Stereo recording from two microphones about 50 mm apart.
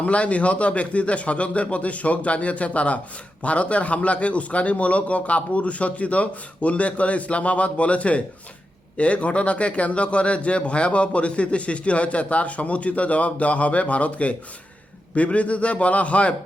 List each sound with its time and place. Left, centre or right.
0.0 s a man's voice: left